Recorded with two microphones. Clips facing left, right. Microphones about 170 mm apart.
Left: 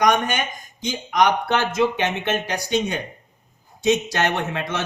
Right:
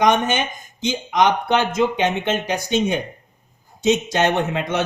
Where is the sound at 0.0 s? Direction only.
25° right (ahead or behind).